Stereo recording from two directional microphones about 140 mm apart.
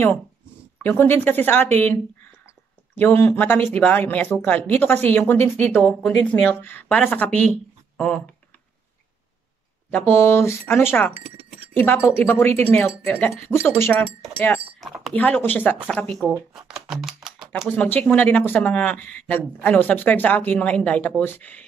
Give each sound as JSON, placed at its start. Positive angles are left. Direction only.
{"t": 0.8, "sound": "speech", "side_deg": 15}
{"t": 3.0, "sound": "speech", "side_deg": 15}
{"t": 9.8, "sound": "speech", "side_deg": 15}
{"t": 14.8, "sound": "speech", "side_deg": 0}
{"t": 15.1, "sound": "speech", "side_deg": 10}
{"t": 16.3, "sound": "speech", "side_deg": -5}
{"t": 17.6, "sound": "speech", "side_deg": 10}